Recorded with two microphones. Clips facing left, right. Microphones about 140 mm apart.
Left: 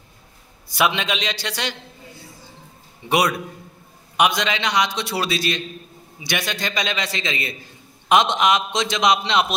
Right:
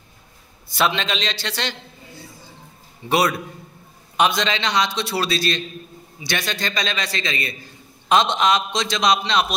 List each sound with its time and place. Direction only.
0.7 s a man's voice: 10° left (ahead or behind)
4.2 s a man's voice: 10° left (ahead or behind)